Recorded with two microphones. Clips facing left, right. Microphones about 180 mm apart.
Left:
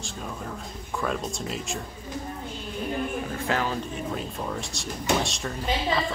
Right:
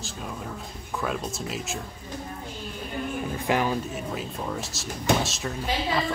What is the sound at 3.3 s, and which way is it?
Speech, 15° right (ahead or behind).